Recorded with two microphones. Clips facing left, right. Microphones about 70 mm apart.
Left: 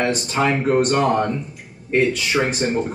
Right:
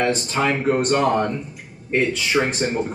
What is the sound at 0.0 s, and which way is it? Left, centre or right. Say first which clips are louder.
Speech: left 1 dB; centre.